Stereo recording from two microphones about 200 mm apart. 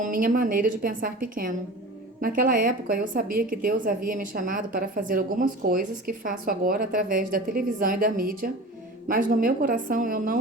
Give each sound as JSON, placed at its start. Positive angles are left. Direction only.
{"t": 0.0, "sound": "a woman's voice", "side_deg": -45}